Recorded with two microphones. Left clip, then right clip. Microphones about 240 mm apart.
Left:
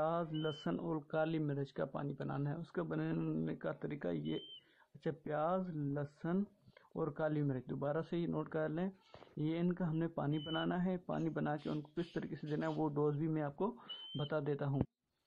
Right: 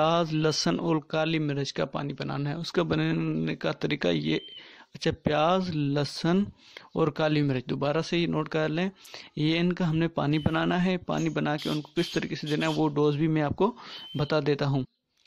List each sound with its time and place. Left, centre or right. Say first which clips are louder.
0.0 s speech: right 13 dB; right